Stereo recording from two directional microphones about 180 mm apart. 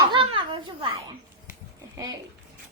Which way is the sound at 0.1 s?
30° right (ahead or behind).